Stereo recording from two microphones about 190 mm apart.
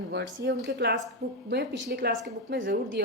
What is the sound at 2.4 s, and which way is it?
Speech, 70° right (ahead or behind).